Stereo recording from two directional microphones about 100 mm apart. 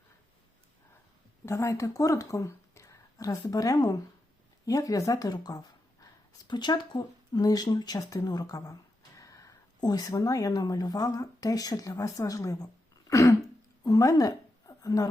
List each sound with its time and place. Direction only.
1.5 s a woman's voice: 30° left (ahead or behind)
13.1 s throat clearing: 35° left (ahead or behind)
13.8 s a woman's voice: 35° left (ahead or behind)